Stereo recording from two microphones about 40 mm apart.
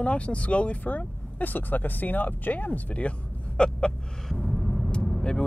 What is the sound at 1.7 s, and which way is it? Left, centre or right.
Speech, left.